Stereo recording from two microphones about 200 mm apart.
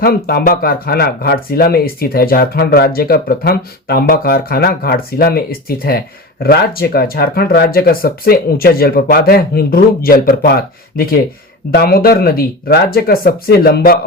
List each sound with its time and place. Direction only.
0.0 s speech: 50° left (ahead or behind)